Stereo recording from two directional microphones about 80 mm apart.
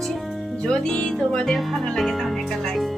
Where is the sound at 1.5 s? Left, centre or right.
Centre.